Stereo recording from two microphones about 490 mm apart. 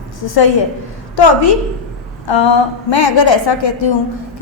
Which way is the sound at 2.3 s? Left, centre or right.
Left.